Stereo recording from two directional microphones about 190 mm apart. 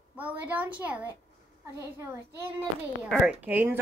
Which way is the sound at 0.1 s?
10° right (ahead or behind).